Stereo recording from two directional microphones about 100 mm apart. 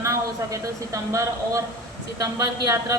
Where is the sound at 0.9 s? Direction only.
30° right (ahead or behind).